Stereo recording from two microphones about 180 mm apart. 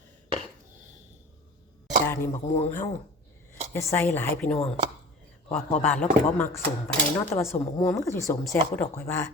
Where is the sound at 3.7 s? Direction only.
10° left (ahead or behind).